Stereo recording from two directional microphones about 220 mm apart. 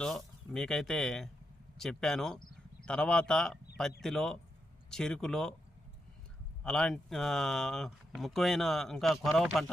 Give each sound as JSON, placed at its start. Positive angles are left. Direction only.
{"t": 0.0, "sound": "speech", "side_deg": 0}
{"t": 6.6, "sound": "speech", "side_deg": 5}